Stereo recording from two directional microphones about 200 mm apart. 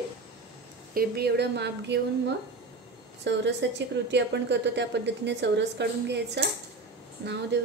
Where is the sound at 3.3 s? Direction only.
60° right (ahead or behind).